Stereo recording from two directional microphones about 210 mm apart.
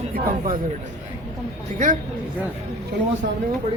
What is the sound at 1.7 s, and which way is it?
Speech, 40° right (ahead or behind).